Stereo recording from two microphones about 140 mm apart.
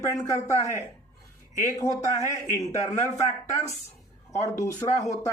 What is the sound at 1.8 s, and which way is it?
Speech, 20° left (ahead or behind).